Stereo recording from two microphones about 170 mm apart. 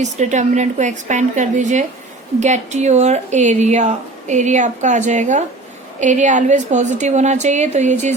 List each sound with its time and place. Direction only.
0.0 s speech: 45° right (ahead or behind)